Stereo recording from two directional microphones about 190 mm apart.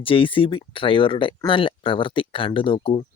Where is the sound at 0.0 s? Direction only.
30° left (ahead or behind).